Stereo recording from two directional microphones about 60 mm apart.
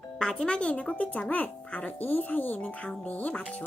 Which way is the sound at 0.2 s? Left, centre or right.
Centre.